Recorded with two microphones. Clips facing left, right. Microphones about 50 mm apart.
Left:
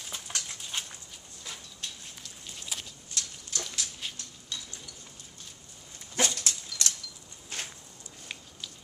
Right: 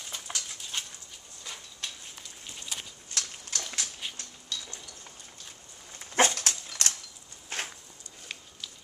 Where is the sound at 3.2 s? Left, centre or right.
Right.